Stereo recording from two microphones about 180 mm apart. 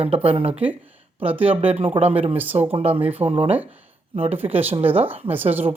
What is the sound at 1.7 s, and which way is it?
Speech, 35° right (ahead or behind).